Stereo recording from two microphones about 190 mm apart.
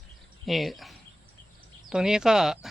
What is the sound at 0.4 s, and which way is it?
Speech, centre (ahead or behind).